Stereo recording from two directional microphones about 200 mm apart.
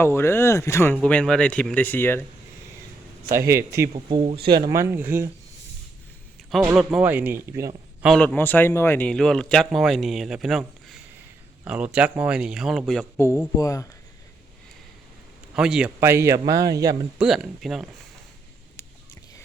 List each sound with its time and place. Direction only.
0.0 s a man's voice: 10° left (ahead or behind)
3.4 s speech: 15° right (ahead or behind)
3.9 s speech: 30° right (ahead or behind)
4.5 s speech: 15° right (ahead or behind)
6.7 s speech: 5° right (ahead or behind)
8.0 s a man's voice: centre (ahead or behind)
13.1 s speech: 15° left (ahead or behind)
15.5 s speech: 5° right (ahead or behind)
17.2 s a man's voice: centre (ahead or behind)